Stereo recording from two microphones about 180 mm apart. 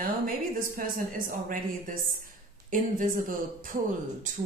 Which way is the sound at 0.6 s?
50° right (ahead or behind).